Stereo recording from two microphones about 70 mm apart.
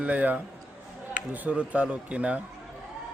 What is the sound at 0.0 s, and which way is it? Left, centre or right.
A man's voice, right.